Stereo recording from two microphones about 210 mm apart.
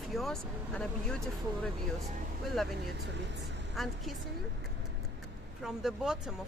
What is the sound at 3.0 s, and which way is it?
Speech, 55° right (ahead or behind).